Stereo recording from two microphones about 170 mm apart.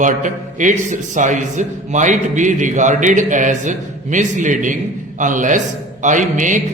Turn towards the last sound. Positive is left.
turn(degrees=-50)  # may be behind; listen again after turning